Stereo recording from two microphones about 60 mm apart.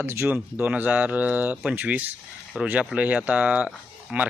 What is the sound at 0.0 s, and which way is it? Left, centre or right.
Speech, right.